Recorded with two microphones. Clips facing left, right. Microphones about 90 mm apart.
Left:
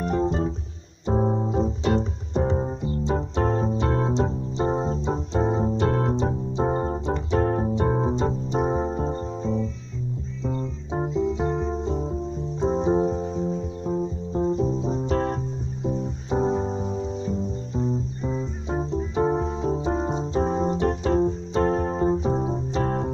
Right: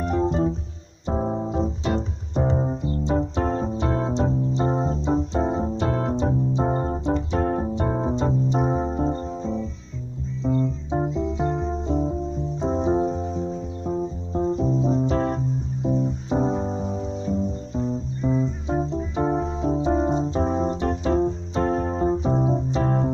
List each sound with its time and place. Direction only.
0.0 s music: 5° right (ahead or behind)
1.1 s keyboard: centre (ahead or behind)
8.7 s music: centre (ahead or behind)
10.4 s music: 40° right (ahead or behind)
11.3 s music: 25° left (ahead or behind)
12.6 s keyboard: centre (ahead or behind)
15.9 s music: centre (ahead or behind)
20.7 s keyboard: centre (ahead or behind)